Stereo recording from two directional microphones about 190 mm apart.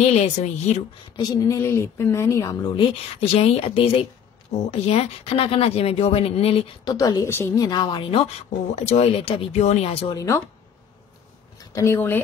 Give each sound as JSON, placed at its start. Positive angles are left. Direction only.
{"t": 0.0, "sound": "speech", "side_deg": 40}
{"t": 1.1, "sound": "a woman's voice", "side_deg": 20}
{"t": 10.1, "sound": "speech", "side_deg": 15}
{"t": 11.5, "sound": "speech", "side_deg": 15}